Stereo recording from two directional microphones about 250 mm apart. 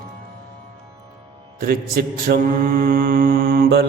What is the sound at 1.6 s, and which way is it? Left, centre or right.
A man's voice, right.